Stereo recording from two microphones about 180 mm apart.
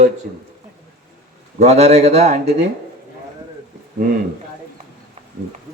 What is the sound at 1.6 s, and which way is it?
Speech, 35° right (ahead or behind).